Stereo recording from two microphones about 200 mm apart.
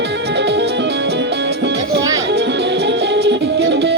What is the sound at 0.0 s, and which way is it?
Music, 55° right (ahead or behind).